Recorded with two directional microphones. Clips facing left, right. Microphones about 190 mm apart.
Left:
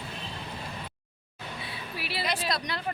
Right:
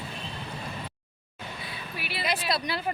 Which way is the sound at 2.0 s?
30° left (ahead or behind).